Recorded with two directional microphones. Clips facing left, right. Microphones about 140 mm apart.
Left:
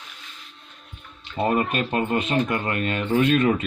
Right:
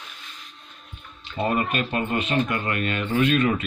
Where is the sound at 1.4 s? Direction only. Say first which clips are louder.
Left 2 dB; 35° left (ahead or behind).